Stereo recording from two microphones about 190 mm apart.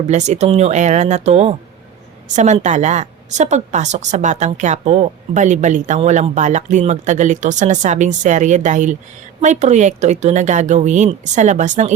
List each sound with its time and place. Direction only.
0.1 s a woman's voice: 40° right (ahead or behind)